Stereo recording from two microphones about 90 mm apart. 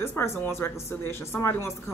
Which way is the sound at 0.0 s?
30° left (ahead or behind).